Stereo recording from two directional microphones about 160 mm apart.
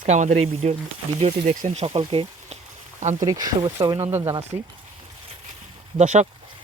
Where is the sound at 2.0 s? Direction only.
35° right (ahead or behind).